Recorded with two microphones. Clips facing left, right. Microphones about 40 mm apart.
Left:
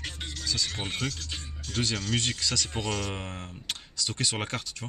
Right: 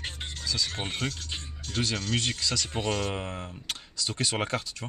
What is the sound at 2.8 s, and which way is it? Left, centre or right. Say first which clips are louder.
Speech: right 3 dB; right.